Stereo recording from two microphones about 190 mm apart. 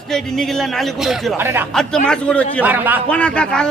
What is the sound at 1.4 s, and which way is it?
Speech, 10° right (ahead or behind).